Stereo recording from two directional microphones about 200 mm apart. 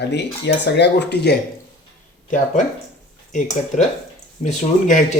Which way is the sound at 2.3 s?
40° left (ahead or behind).